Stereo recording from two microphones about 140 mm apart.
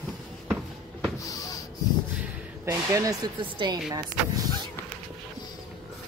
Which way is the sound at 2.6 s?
25° right (ahead or behind).